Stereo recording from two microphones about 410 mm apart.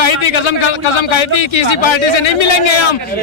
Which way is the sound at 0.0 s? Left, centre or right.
Left.